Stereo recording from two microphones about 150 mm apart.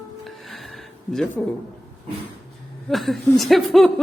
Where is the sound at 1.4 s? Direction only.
Centre (ahead or behind).